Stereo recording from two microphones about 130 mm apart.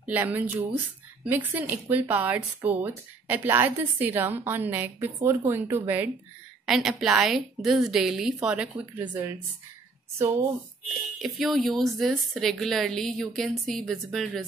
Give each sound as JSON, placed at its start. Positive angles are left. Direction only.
{"t": 0.0, "sound": "speech", "side_deg": -15}
{"t": 6.6, "sound": "a woman's voice", "side_deg": -5}
{"t": 11.1, "sound": "a woman's voice", "side_deg": 0}